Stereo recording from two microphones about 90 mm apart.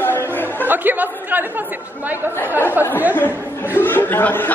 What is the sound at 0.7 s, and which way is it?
Chatter, 20° right (ahead or behind).